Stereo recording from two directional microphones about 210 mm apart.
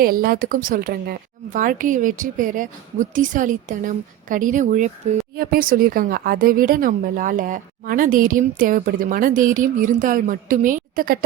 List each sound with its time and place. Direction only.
0.0 s speech: 45° right (ahead or behind)